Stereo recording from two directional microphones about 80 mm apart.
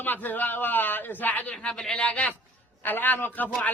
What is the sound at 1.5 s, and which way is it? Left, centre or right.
A man's voice, centre.